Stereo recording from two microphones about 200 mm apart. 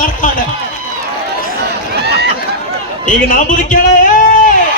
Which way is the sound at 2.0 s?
55° right (ahead or behind).